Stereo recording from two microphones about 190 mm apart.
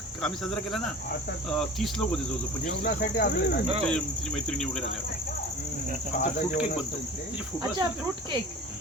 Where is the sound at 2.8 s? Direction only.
60° left (ahead or behind).